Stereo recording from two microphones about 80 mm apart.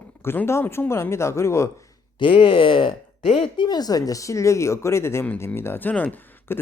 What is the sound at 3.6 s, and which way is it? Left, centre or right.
Speech, left.